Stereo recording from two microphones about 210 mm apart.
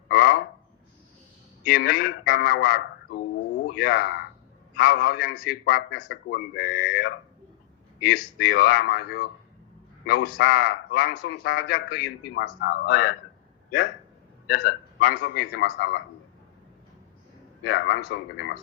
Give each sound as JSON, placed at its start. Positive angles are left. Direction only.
{"t": 0.1, "sound": "a sound", "side_deg": 45}
{"t": 1.7, "sound": "a man's voice", "side_deg": 45}
{"t": 8.4, "sound": "a man's voice", "side_deg": 45}
{"t": 14.4, "sound": "a man's voice", "side_deg": 45}
{"t": 17.6, "sound": "a man's voice", "side_deg": 50}